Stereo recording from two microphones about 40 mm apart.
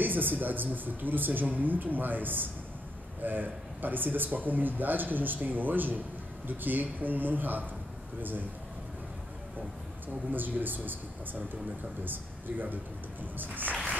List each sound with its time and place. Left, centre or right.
0.0 s speech: right
10.0 s speech: right